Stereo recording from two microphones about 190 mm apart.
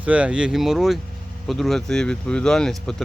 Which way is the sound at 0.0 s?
5° right (ahead or behind).